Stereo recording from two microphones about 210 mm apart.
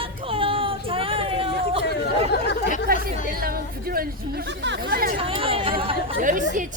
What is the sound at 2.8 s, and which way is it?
Chatter, 45° right (ahead or behind).